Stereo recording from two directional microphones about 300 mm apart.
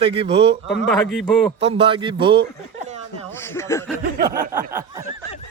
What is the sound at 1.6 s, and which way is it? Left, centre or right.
Speech, centre.